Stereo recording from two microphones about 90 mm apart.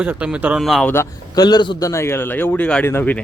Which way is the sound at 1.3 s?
50° left (ahead or behind).